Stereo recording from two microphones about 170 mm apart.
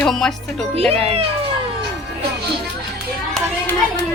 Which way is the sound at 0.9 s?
35° right (ahead or behind).